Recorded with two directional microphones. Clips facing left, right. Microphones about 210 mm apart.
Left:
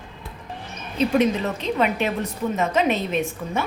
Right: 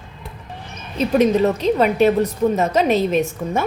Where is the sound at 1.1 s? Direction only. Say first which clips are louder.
Right 8 dB; 40° right (ahead or behind).